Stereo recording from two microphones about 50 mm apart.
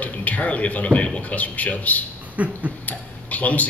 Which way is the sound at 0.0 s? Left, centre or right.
Left.